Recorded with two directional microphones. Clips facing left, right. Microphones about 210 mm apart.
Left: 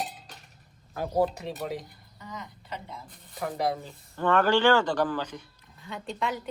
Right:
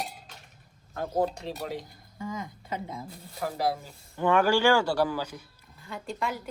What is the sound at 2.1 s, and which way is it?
Speech, 50° right (ahead or behind).